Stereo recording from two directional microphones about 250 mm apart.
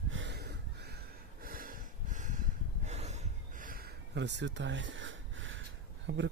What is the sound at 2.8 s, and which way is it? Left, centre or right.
Gasp, right.